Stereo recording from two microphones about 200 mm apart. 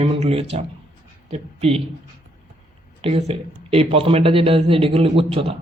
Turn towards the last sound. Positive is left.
turn(degrees=-30)  # may be behind; listen again after turning